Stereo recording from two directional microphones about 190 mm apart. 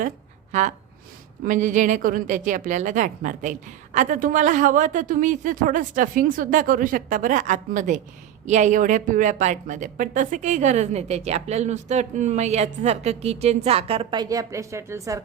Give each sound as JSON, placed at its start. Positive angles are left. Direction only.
{"t": 0.5, "sound": "a woman's voice", "side_deg": -40}